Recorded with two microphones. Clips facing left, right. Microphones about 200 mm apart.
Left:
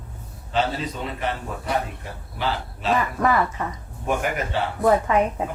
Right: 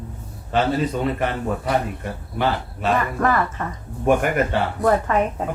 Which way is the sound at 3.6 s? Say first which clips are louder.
Even; 10° left (ahead or behind).